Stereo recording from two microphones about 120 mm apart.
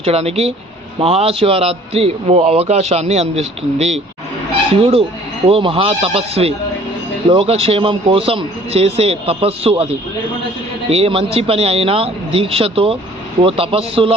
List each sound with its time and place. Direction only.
0.0 s a man's voice: 60° right (ahead or behind)
4.7 s a man's voice: 55° right (ahead or behind)